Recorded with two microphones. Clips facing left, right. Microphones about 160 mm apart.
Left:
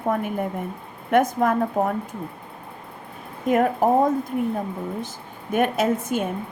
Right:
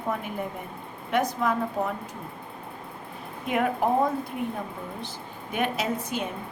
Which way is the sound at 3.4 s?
40° left (ahead or behind).